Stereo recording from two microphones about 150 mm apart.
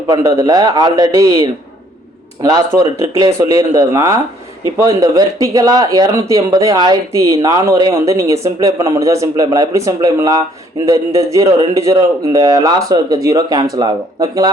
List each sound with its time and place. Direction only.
0.1 s speech: 25° right (ahead or behind)
2.4 s speech: 25° right (ahead or behind)